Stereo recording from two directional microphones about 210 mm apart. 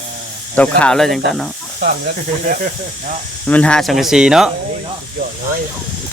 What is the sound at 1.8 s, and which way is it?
Speech, 45° right (ahead or behind).